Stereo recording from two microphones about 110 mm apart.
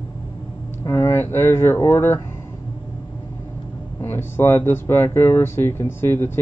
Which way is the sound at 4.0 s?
20° left (ahead or behind).